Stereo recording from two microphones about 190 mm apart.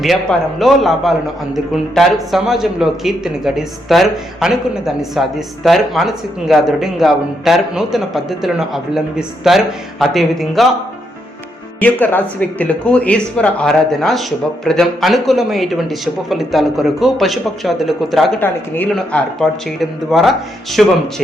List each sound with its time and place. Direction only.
0.0 s a man's voice: centre (ahead or behind)
11.8 s a man's voice: 10° left (ahead or behind)
18.4 s a man's voice: 10° left (ahead or behind)